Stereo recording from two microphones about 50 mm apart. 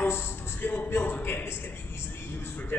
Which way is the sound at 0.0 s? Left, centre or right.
Left.